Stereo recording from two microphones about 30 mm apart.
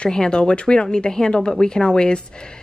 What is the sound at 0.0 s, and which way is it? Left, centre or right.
A woman's voice, left.